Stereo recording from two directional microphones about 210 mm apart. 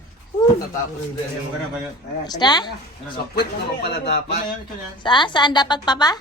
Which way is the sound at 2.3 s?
20° left (ahead or behind).